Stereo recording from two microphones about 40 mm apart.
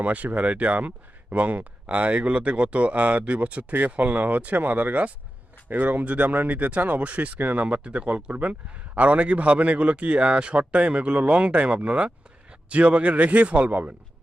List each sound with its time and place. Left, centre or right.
0.0 s a man's voice: right
3.7 s a man's voice: right
7.3 s speech: right
7.6 s a man's voice: right